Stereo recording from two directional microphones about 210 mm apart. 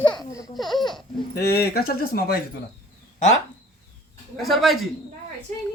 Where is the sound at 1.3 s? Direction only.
45° left (ahead or behind).